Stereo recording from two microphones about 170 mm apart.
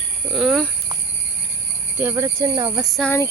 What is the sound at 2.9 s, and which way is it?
Speech, 5° left (ahead or behind).